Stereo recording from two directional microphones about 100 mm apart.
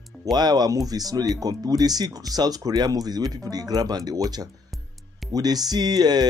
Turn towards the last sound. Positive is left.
turn(degrees=-45)  # may be behind; listen again after turning